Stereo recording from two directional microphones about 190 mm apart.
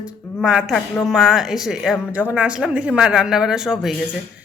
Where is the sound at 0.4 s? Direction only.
5° right (ahead or behind).